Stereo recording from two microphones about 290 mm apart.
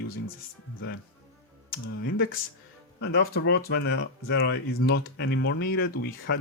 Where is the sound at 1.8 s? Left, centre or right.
Left.